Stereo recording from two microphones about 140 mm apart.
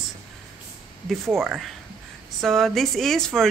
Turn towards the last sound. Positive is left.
turn(degrees=0)  # may be behind; listen again after turning